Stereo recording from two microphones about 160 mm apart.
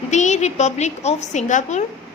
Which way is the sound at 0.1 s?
50° left (ahead or behind).